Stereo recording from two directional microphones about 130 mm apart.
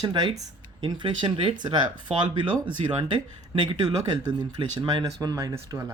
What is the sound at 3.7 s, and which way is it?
Speech, 35° right (ahead or behind).